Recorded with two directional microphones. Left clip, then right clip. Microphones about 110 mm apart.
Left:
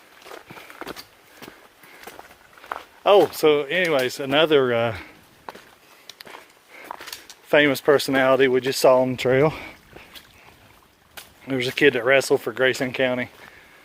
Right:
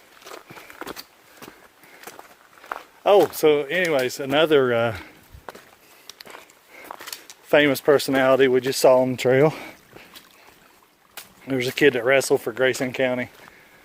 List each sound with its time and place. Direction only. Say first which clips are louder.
0.3 s walk: even; 5° right (ahead or behind)
2.6 s speech: left 1 dB; 15° right (ahead or behind)
4.4 s speech: right 2 dB; 30° right (ahead or behind)
6.1 s walk: left 1 dB; 25° right (ahead or behind)
7.5 s speech: even; 30° right (ahead or behind); by 10.1 s 45° right (ahead or behind)
11.4 s speech: even; 30° right (ahead or behind)